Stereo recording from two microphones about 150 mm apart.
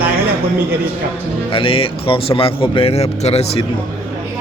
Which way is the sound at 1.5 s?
35° left (ahead or behind).